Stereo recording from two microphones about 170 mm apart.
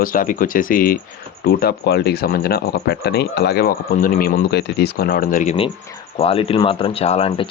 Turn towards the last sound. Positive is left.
turn(degrees=35)  # may be behind; listen again after turning